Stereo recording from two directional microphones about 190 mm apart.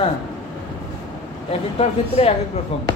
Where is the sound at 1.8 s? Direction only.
30° left (ahead or behind).